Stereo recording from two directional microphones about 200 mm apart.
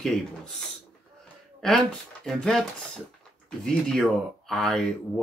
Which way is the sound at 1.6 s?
Centre (ahead or behind).